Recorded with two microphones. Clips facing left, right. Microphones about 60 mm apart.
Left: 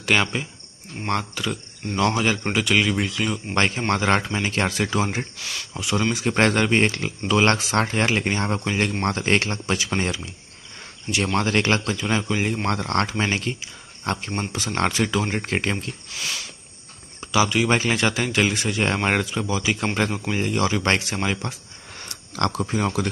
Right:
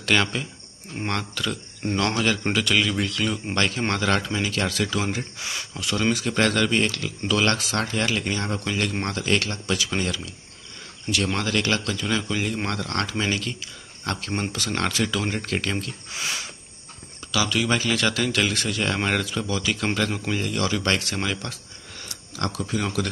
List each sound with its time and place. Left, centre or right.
0.0 s speech: centre
3.5 s speech: left
5.4 s speech: centre
5.8 s speech: centre
6.1 s speech: left
11.3 s speech: left
16.1 s speech: right
17.3 s speech: left
22.1 s speech: left